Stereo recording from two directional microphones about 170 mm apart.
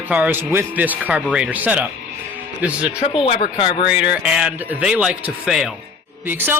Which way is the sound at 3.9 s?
5° right (ahead or behind).